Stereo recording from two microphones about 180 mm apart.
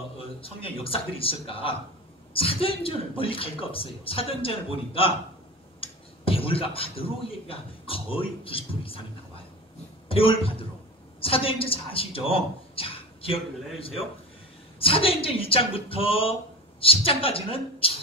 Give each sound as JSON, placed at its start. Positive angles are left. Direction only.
{"t": 0.2, "sound": "a man's voice", "side_deg": 30}
{"t": 10.0, "sound": "a man's voice", "side_deg": 30}